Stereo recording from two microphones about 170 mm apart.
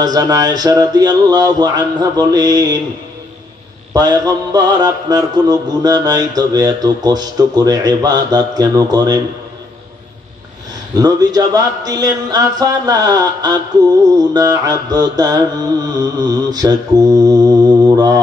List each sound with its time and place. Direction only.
0.0 s mantra: 20° right (ahead or behind)
3.9 s mantra: 25° right (ahead or behind)
11.0 s mantra: 25° right (ahead or behind)